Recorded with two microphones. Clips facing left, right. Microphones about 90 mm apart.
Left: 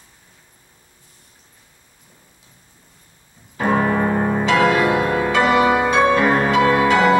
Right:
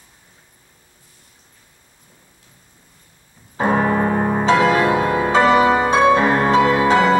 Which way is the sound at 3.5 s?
25° right (ahead or behind).